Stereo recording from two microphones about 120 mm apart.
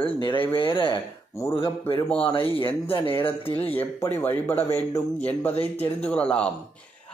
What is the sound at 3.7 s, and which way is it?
Speech, 15° left (ahead or behind).